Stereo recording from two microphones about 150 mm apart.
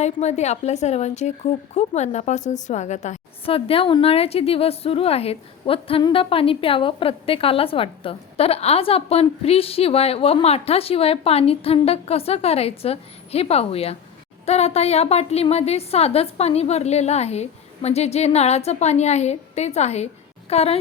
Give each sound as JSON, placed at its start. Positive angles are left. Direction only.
{"t": 0.0, "sound": "a woman's voice", "side_deg": 50}
{"t": 3.4, "sound": "a woman's voice", "side_deg": 40}